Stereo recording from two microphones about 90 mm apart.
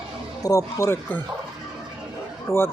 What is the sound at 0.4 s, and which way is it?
Speech, 40° left (ahead or behind).